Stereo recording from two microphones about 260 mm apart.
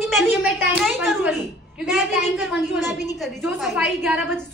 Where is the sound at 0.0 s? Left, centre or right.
Centre.